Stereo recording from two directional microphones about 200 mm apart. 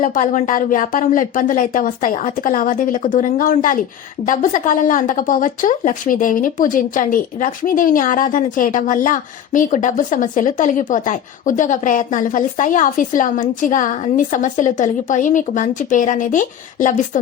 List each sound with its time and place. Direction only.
0.0 s speech: 40° left (ahead or behind)